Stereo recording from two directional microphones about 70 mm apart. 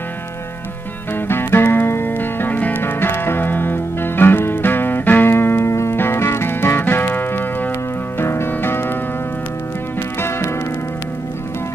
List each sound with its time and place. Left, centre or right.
1.3 s music: left